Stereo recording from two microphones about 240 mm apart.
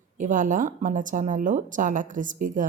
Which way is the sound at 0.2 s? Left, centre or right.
Right.